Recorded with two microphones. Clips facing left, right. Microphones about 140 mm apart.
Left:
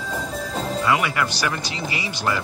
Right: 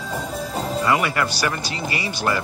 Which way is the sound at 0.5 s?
Centre (ahead or behind).